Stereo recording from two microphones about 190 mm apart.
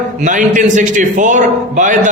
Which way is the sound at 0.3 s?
40° right (ahead or behind).